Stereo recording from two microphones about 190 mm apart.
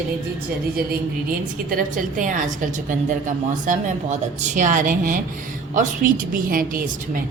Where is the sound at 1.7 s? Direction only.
45° right (ahead or behind).